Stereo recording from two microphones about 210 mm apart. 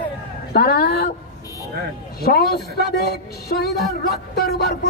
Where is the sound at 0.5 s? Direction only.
45° left (ahead or behind).